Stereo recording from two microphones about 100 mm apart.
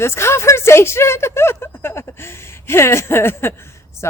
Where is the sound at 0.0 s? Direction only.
25° left (ahead or behind).